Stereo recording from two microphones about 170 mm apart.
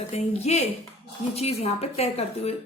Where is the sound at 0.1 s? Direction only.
40° left (ahead or behind).